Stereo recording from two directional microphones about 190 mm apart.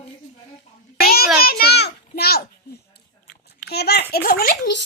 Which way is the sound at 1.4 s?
55° left (ahead or behind).